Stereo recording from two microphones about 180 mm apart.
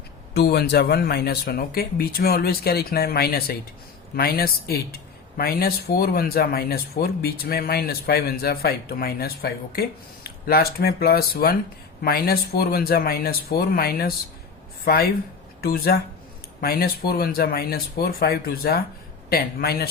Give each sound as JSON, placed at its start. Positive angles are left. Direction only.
{"t": 0.3, "sound": "speech", "side_deg": 65}